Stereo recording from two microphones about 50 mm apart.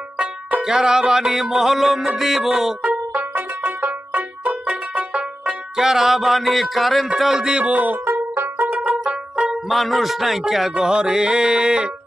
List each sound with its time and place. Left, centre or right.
0.2 s music: right
2.8 s music: right
5.8 s music: centre
7.2 s music: centre
7.5 s speech: right
8.0 s banjo: right
8.7 s music: right
9.7 s music: centre